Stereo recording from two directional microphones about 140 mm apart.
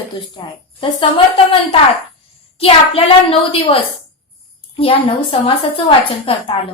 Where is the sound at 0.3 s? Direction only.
35° left (ahead or behind).